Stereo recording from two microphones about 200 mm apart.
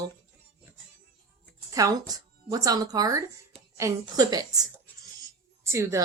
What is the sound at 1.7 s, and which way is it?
A woman's voice, 20° right (ahead or behind).